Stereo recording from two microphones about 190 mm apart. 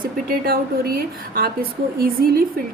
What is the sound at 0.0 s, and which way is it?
A woman's voice, 50° right (ahead or behind).